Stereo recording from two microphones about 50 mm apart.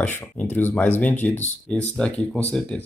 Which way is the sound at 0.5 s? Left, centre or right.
Left.